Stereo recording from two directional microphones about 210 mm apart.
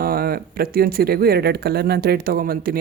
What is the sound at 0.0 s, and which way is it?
Speech, 45° right (ahead or behind).